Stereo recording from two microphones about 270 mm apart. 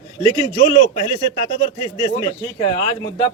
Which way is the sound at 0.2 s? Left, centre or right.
Centre.